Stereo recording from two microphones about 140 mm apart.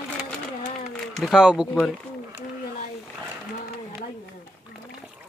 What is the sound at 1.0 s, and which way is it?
Speech, centre (ahead or behind).